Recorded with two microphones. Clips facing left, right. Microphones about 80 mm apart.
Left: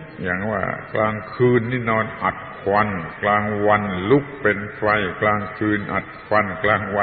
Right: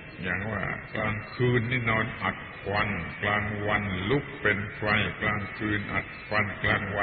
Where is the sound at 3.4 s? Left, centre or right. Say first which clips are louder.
Left 11 dB; left.